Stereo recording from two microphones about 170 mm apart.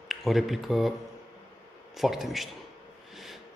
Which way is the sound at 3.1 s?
Centre (ahead or behind).